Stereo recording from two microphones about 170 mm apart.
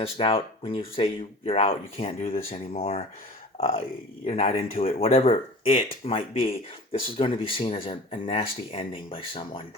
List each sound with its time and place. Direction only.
0.0 s speech: 35° left (ahead or behind)
2.3 s speech: 55° left (ahead or behind)
3.6 s speech: 35° left (ahead or behind)